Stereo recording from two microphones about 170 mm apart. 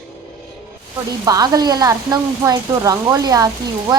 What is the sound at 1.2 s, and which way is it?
Speech, 20° right (ahead or behind).